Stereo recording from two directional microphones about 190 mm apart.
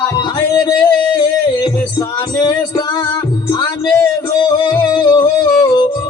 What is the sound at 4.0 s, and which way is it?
Music, 20° left (ahead or behind).